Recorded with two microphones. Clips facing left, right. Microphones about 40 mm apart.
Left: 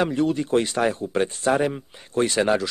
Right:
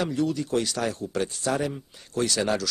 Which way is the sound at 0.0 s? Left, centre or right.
Left.